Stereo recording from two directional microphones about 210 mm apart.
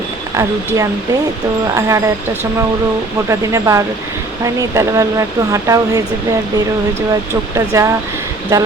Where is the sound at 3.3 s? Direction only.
15° right (ahead or behind).